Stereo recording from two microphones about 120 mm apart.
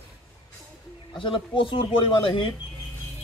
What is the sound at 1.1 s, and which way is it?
Speech, 45° left (ahead or behind).